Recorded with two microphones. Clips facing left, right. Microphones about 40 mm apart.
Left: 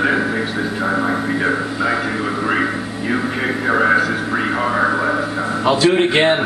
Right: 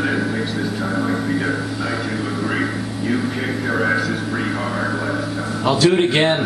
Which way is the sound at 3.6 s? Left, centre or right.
Left.